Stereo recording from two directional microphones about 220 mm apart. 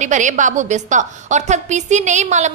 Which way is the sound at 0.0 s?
35° right (ahead or behind).